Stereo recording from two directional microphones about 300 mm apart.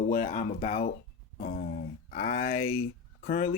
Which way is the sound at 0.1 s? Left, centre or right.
Left.